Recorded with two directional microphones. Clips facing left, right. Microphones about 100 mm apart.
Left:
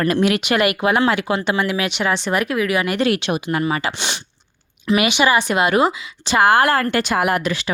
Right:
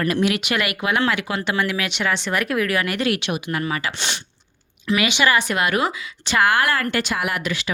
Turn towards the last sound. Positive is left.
turn(degrees=35)  # may be behind; listen again after turning